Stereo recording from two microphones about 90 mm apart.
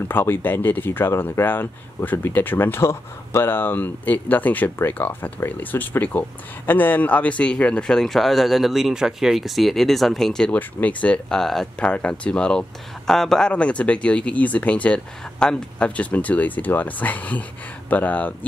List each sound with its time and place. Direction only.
0.1 s speech: 25° left (ahead or behind)